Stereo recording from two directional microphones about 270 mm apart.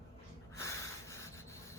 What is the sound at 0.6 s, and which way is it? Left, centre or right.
Snort, centre.